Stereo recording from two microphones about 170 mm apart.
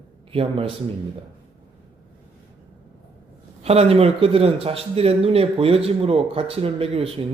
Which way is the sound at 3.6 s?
35° right (ahead or behind).